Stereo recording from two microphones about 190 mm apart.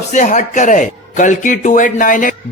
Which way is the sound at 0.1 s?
40° left (ahead or behind).